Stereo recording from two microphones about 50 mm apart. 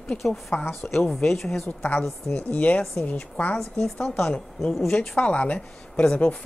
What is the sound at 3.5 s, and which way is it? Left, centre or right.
Speech, centre.